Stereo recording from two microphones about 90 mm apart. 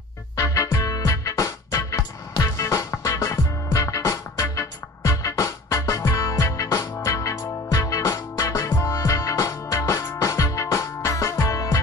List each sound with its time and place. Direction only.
0.4 s music: 40° left (ahead or behind)